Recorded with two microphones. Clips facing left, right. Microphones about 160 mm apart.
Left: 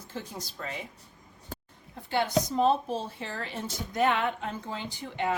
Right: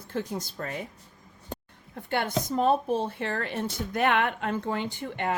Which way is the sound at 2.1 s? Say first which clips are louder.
Left 1 dB; 55° right (ahead or behind).